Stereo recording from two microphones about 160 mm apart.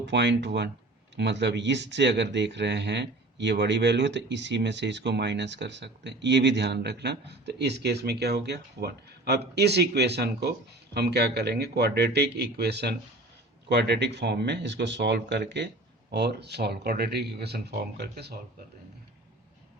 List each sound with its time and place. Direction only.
0.0 s speech: 90° right